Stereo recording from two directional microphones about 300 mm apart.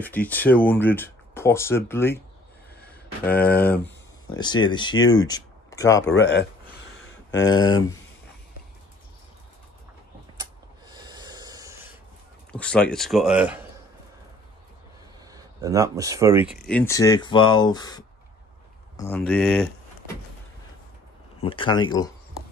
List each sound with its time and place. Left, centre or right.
0.0 s speech: centre
3.3 s speech: centre
6.1 s speech: left
7.0 s a sound: left
7.4 s speech: centre
11.0 s rub: centre
12.5 s speech: centre
15.3 s speech: centre
16.6 s speech: centre
21.4 s speech: centre